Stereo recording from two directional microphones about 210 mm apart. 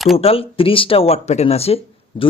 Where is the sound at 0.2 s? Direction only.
25° left (ahead or behind).